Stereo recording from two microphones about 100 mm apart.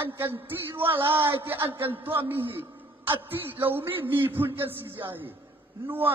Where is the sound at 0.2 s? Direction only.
20° right (ahead or behind).